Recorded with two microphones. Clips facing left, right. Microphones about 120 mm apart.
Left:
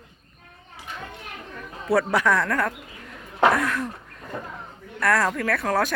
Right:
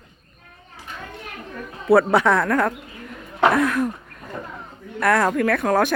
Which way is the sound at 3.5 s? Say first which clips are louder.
Right 5 dB; 20° right (ahead or behind).